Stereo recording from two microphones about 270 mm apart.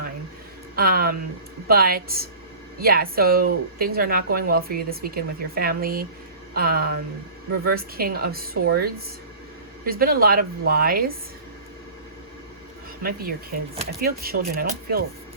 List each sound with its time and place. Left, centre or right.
0.8 s speech: right
13.0 s speech: right